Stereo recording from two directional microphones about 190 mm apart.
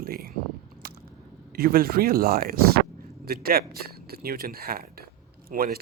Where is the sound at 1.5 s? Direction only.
50° right (ahead or behind).